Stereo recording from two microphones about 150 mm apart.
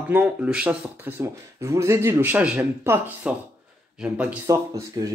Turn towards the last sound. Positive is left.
turn(degrees=-20)  # may be behind; listen again after turning